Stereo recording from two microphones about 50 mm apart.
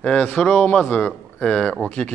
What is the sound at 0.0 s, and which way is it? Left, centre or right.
A man's voice, left.